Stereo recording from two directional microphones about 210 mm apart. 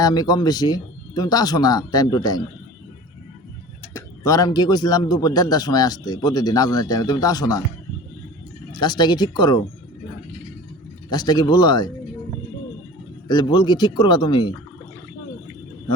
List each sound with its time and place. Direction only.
0.0 s speech: 20° left (ahead or behind)
3.9 s a man's voice: 15° left (ahead or behind)
8.7 s speech: 20° left (ahead or behind)
11.1 s speech: 20° left (ahead or behind)
13.2 s speech: 20° left (ahead or behind)